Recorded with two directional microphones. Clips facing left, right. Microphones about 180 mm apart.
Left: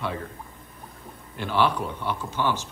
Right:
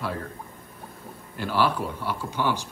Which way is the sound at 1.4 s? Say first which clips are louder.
Left 1 dB; 5° right (ahead or behind).